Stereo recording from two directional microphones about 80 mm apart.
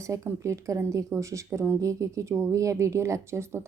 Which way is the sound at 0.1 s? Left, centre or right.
Right.